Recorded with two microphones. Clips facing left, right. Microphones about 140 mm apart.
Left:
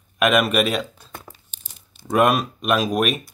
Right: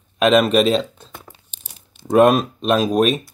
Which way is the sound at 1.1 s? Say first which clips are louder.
Left 1 dB; centre (ahead or behind).